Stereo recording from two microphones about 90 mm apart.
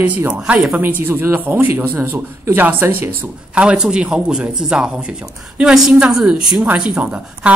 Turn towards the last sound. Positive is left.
turn(degrees=-15)  # may be behind; listen again after turning